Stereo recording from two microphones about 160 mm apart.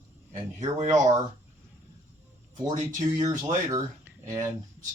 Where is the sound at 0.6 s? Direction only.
50° right (ahead or behind).